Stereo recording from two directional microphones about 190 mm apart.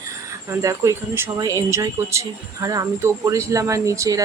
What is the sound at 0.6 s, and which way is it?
Speech, 15° right (ahead or behind).